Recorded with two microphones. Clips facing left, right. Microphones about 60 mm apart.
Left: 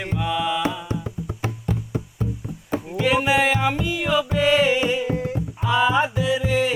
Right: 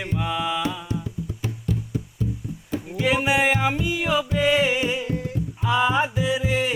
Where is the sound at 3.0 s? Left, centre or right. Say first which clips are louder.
Left 2 dB; centre.